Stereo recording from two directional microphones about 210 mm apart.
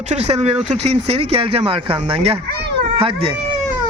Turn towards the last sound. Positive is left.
turn(degrees=-25)  # may be behind; listen again after turning